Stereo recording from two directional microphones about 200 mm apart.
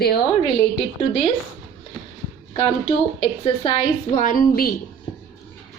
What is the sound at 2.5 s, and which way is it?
Speech, 25° left (ahead or behind).